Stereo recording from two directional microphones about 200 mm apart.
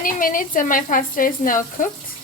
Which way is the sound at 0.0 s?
45° left (ahead or behind).